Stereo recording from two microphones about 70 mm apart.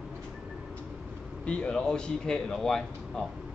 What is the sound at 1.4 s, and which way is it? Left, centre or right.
Speech, centre.